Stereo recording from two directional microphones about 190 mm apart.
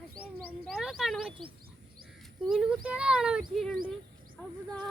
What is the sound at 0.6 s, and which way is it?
Speech, centre (ahead or behind).